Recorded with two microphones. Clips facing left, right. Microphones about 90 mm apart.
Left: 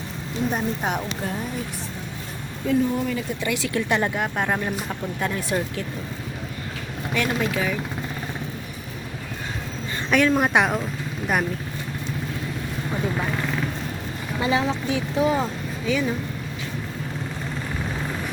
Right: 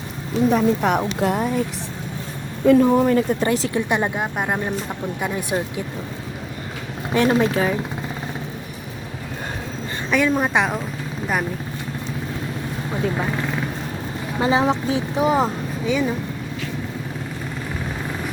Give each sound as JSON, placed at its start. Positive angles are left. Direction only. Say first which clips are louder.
{"t": 0.5, "sound": "speech", "louder": "right 8 dB", "side_deg": -65}
{"t": 2.6, "sound": "speech", "louder": "right 8 dB", "side_deg": -60}
{"t": 3.5, "sound": "speech", "louder": "right 5 dB", "side_deg": -35}
{"t": 3.8, "sound": "speech", "louder": "right 2 dB", "side_deg": -20}
{"t": 7.1, "sound": "speech", "louder": "right 7 dB", "side_deg": -30}
{"t": 10.1, "sound": "speech", "louder": "even", "side_deg": -5}
{"t": 14.3, "sound": "speech", "louder": "right 4 dB", "side_deg": -30}